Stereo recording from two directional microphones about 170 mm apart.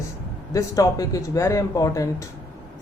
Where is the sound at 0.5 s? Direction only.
20° left (ahead or behind).